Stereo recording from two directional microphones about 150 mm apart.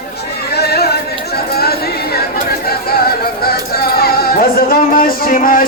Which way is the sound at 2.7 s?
90° left.